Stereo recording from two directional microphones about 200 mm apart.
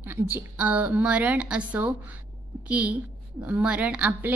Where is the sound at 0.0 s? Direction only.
10° right (ahead or behind).